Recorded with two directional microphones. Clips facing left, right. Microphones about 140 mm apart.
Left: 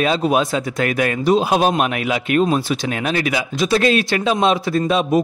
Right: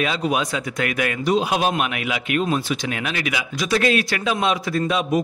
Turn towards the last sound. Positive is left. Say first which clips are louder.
# left 4 dB
turn(degrees=30)  # may be behind; listen again after turning